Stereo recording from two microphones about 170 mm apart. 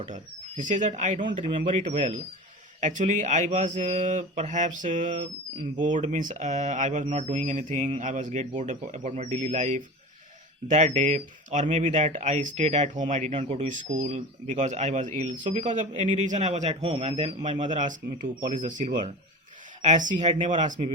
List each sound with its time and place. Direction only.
0.0 s speech: 45° right (ahead or behind)
13.7 s a man's voice: 50° right (ahead or behind)